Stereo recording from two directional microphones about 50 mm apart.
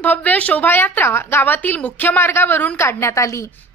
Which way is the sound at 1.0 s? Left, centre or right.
Left.